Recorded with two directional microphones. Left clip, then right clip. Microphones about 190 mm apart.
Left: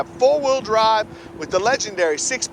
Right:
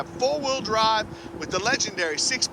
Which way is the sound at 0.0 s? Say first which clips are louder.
Left 8 dB; 15° right (ahead or behind).